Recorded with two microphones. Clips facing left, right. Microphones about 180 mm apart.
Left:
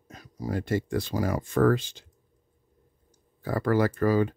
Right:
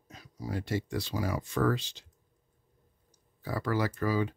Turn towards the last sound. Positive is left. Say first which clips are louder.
# left 6 dB
turn(degrees=50)  # may be behind; listen again after turning